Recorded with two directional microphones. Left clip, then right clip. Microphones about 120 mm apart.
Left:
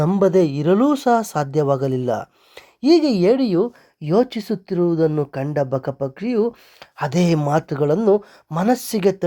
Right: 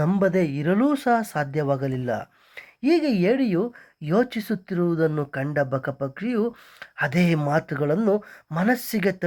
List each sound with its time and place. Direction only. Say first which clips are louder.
0.0 s speech: left 6 dB; 40° left (ahead or behind)